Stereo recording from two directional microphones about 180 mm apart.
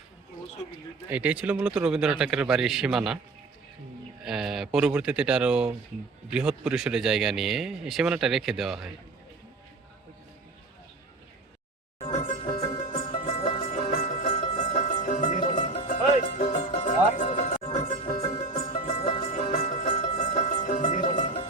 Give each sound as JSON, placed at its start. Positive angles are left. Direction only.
{"t": 1.1, "sound": "speech", "side_deg": -5}
{"t": 4.2, "sound": "speech", "side_deg": 0}
{"t": 11.9, "sound": "music", "side_deg": 35}